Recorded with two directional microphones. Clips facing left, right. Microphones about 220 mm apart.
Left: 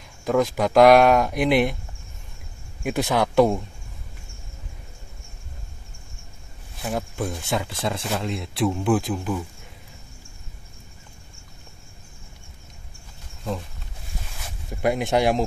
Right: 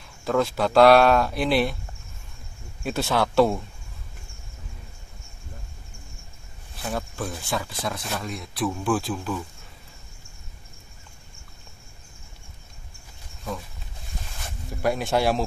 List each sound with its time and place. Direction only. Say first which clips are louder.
0.2 s speech: left 2 dB; 15° left (ahead or behind)
2.8 s speech: left 2 dB; 15° left (ahead or behind)
6.8 s speech: left 3 dB; 15° left (ahead or behind)
14.8 s speech: left 2 dB; 20° left (ahead or behind)